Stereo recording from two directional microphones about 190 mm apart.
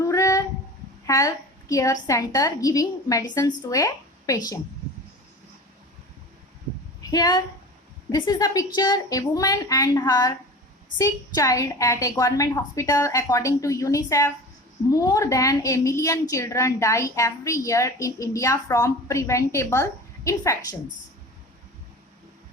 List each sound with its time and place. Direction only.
0.0 s a sound: 15° left (ahead or behind)
1.0 s a woman's voice: 15° left (ahead or behind)
7.0 s a woman's voice: 20° left (ahead or behind)